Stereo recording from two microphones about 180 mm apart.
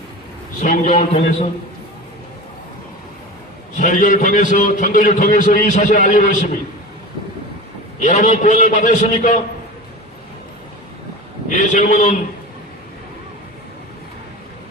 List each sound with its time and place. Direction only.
0.6 s a man's voice: 45° left (ahead or behind)
3.8 s a man's voice: 45° left (ahead or behind)
7.9 s a man's voice: 45° left (ahead or behind)
11.4 s a man's voice: 45° left (ahead or behind)